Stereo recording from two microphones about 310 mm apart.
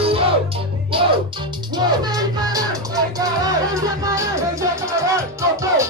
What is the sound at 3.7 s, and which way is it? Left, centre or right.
Music, centre.